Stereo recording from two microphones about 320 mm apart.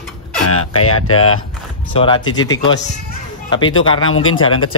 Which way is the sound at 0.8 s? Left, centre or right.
Left.